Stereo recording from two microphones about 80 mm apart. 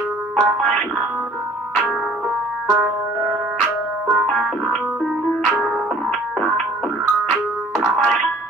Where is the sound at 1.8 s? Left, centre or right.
Centre.